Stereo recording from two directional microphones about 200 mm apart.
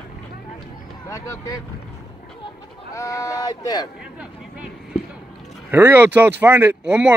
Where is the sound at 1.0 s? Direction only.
15° left (ahead or behind).